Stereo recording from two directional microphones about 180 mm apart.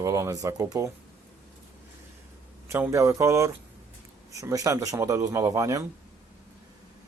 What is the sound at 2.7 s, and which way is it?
A man's voice, 15° right (ahead or behind).